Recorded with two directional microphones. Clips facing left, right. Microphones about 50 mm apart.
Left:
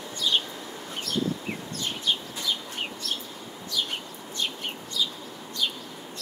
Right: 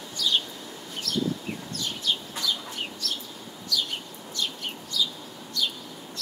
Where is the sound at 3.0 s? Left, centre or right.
Left.